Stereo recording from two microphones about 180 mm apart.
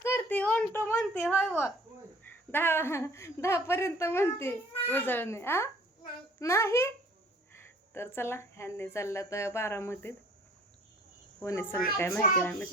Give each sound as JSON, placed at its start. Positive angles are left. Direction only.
{"t": 0.0, "sound": "a sound", "side_deg": 10}
{"t": 2.2, "sound": "a woman's voice", "side_deg": 10}
{"t": 11.4, "sound": "a woman's voice", "side_deg": 15}